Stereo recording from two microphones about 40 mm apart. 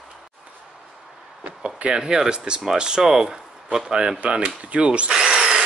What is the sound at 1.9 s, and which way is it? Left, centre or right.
Speech, centre.